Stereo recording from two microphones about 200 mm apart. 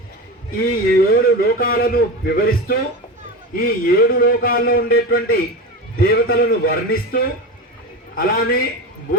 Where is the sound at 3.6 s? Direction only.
45° left (ahead or behind).